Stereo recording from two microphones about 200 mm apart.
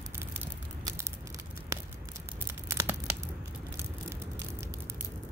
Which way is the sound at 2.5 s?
15° right (ahead or behind).